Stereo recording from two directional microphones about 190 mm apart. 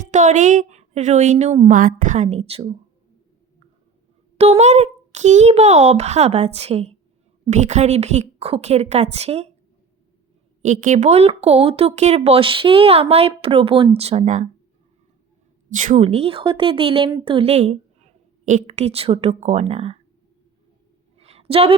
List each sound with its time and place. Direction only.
0.1 s speech: 40° right (ahead or behind)
4.4 s speech: 35° right (ahead or behind)
10.6 s speech: 40° right (ahead or behind)
15.8 s speech: 35° right (ahead or behind)
21.2 s a sound: 35° right (ahead or behind)